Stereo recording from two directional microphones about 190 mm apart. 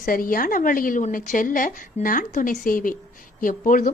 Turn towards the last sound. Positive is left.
turn(degrees=45)  # may be behind; listen again after turning